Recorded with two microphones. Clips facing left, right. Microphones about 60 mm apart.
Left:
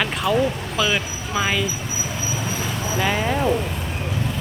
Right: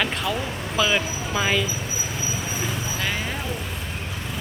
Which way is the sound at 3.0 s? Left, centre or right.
Centre.